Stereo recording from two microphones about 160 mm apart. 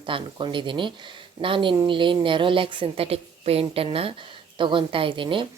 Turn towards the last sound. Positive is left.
turn(degrees=-30)  # may be behind; listen again after turning